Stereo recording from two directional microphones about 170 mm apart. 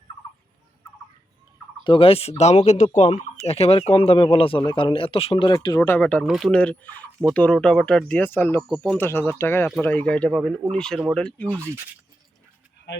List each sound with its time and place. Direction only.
1.8 s speech: 30° left (ahead or behind)
5.5 s speech: 20° left (ahead or behind)